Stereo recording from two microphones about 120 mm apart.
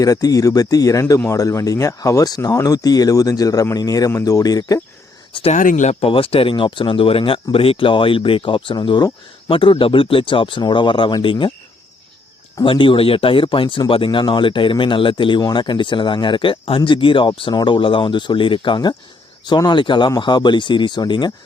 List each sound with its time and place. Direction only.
0.0 s speech: 30° left (ahead or behind)
5.5 s speech: 85° left; by 11.5 s 45° left (ahead or behind)
12.6 s speech: 45° left (ahead or behind)